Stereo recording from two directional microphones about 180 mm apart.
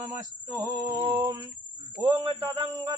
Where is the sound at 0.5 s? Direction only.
25° right (ahead or behind).